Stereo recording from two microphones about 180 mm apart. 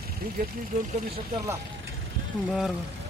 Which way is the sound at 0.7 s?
45° right (ahead or behind).